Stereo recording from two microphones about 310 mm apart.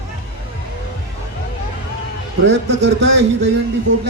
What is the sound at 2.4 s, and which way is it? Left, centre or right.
Speech, right.